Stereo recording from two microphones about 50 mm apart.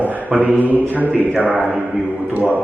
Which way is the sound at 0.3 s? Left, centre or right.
Centre.